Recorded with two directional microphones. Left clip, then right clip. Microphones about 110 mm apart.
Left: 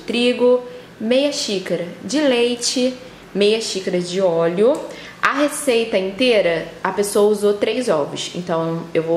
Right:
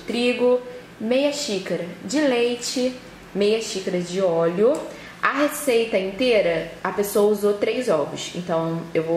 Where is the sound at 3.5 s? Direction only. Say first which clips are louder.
Left 4 dB; 35° left (ahead or behind).